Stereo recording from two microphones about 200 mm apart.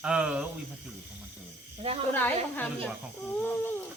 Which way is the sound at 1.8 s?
30° right (ahead or behind).